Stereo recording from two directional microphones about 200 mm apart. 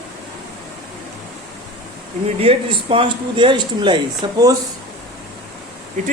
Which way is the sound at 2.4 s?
30° right (ahead or behind).